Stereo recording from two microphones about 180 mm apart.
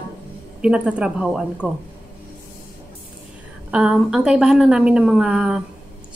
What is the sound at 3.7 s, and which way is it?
A woman's voice, 5° right (ahead or behind).